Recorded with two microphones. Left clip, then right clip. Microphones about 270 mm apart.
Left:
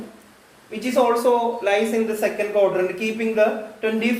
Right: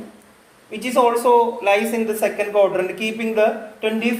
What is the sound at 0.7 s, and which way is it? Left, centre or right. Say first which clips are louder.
Speech: right 2 dB; right.